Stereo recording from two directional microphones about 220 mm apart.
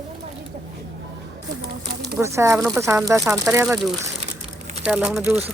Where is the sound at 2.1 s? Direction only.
15° right (ahead or behind).